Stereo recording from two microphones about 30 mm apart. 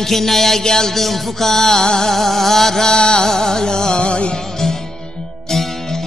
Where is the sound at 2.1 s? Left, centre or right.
Centre.